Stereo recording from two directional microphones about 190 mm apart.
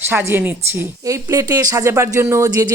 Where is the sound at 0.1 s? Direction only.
10° right (ahead or behind).